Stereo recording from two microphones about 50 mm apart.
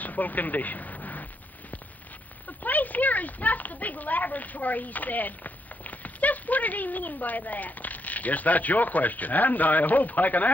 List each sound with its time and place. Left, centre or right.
0.0 s speech: left
2.4 s speech: left